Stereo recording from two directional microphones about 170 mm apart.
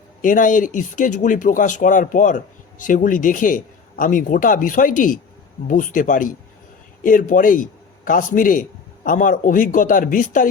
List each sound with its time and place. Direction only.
0.2 s a man's voice: 50° left (ahead or behind)